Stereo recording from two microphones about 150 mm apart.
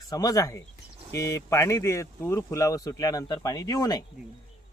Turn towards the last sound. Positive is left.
turn(degrees=25)  # may be behind; listen again after turning